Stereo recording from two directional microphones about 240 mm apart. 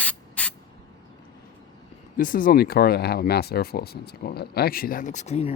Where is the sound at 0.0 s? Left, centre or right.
Centre.